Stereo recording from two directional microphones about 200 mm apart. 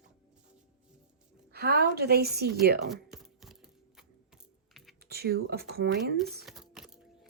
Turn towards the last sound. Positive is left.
turn(degrees=0)  # may be behind; listen again after turning